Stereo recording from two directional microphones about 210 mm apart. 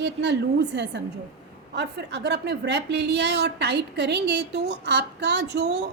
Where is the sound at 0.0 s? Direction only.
55° right (ahead or behind).